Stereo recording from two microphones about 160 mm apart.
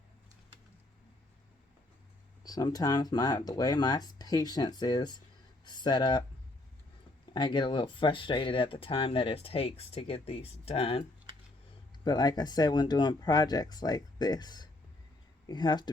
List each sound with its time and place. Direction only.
2.4 s speech: 25° left (ahead or behind)
7.3 s speech: 30° left (ahead or behind)
12.0 s speech: 25° left (ahead or behind)